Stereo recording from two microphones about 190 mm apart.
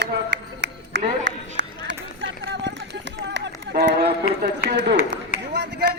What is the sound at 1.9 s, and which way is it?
Run, 65° right (ahead or behind).